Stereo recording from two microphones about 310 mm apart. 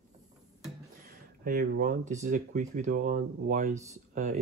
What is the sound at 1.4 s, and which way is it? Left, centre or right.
Speech, right.